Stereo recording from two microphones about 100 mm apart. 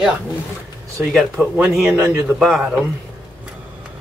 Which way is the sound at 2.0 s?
25° right (ahead or behind).